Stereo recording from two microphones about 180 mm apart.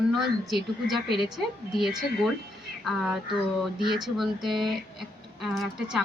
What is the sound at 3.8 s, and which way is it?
Speech, 25° right (ahead or behind).